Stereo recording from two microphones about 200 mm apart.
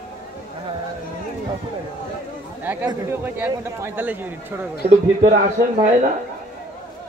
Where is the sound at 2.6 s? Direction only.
10° right (ahead or behind).